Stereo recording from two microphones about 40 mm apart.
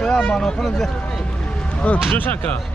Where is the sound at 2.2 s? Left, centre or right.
Left.